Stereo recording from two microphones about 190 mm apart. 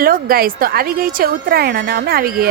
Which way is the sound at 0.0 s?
50° right (ahead or behind).